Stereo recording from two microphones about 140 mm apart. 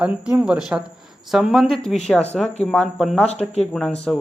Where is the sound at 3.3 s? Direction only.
50° left (ahead or behind).